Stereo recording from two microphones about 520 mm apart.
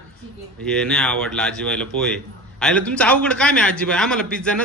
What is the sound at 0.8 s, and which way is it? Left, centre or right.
A man's voice, centre.